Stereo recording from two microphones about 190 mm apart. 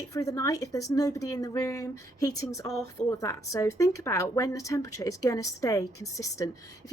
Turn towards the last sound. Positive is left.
turn(degrees=15)  # may be behind; listen again after turning